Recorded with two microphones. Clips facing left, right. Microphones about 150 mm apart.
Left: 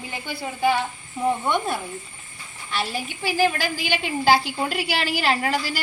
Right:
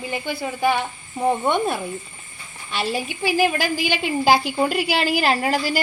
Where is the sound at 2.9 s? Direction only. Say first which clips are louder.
Right 5 dB; 10° right (ahead or behind).